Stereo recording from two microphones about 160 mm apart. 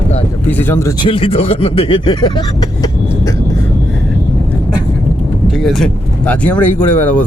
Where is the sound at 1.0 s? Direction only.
35° left (ahead or behind).